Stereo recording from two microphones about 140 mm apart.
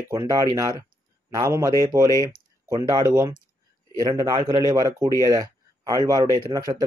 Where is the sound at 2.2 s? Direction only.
25° right (ahead or behind).